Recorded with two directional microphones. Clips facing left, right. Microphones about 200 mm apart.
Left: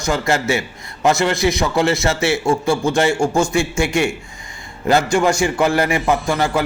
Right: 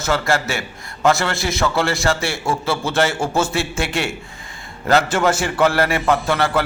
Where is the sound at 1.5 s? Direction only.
15° left (ahead or behind).